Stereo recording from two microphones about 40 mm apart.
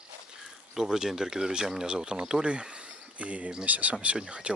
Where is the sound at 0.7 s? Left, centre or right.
Centre; by 3.9 s right.